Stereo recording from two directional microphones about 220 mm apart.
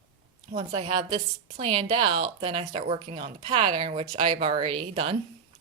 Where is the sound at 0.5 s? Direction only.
25° right (ahead or behind).